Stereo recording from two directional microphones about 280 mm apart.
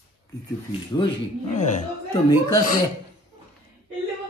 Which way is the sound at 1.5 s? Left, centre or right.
Left.